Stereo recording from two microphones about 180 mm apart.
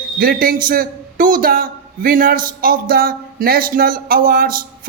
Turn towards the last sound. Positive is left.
turn(degrees=-55)  # may be behind; listen again after turning